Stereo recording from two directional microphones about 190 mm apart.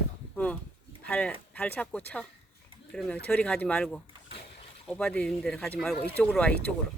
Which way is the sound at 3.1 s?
5° left (ahead or behind).